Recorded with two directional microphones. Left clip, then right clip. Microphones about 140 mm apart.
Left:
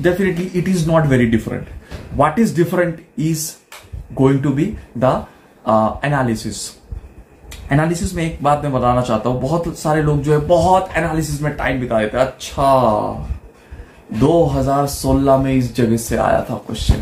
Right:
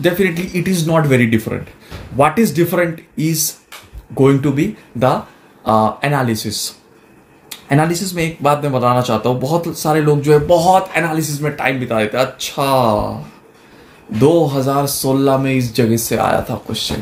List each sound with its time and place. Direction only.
0.0 s speech: 35° right (ahead or behind)
14.2 s speech: 35° right (ahead or behind)